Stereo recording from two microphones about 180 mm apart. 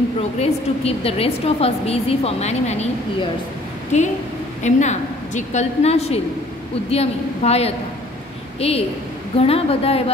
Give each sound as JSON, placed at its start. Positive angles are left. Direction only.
{"t": 0.4, "sound": "a woman's voice", "side_deg": 35}
{"t": 4.6, "sound": "a woman's voice", "side_deg": 40}